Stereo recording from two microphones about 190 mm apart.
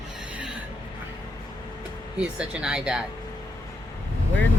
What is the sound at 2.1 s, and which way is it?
Speech, 5° right (ahead or behind).